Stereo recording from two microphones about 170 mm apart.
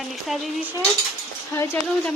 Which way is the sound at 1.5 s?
15° left (ahead or behind).